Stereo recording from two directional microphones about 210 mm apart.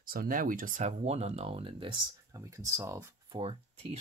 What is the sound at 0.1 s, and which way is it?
Speech, 40° right (ahead or behind).